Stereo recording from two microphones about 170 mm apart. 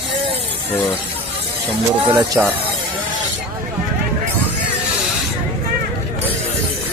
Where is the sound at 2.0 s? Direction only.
25° right (ahead or behind).